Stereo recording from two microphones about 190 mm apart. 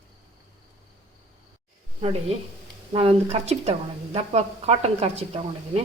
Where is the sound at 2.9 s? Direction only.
30° right (ahead or behind).